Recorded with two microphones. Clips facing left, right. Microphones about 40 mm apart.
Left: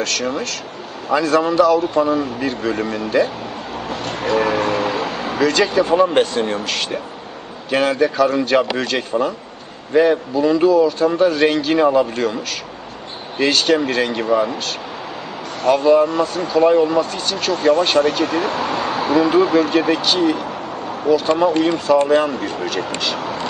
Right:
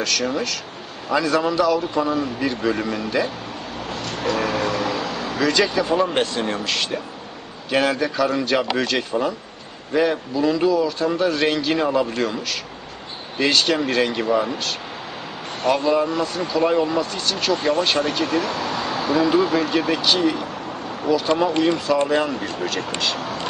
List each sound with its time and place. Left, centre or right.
0.0 s speech: centre
3.9 s music: left
5.4 s speech: centre
13.4 s speech: centre
16.2 s speech: centre
18.7 s a sound: left
19.3 s speech: centre